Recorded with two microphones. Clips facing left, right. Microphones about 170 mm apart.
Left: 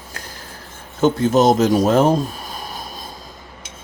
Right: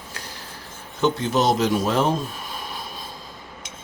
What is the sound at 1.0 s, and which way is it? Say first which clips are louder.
Speech: left 6 dB; 45° left (ahead or behind).